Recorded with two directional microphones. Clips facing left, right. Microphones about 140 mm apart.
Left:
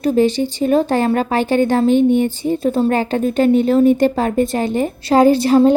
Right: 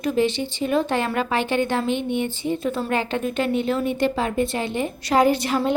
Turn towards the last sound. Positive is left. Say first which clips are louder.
# left 9 dB
turn(degrees=35)  # may be behind; listen again after turning